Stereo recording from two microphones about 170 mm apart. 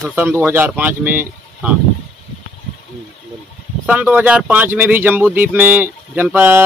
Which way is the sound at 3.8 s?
10° right (ahead or behind).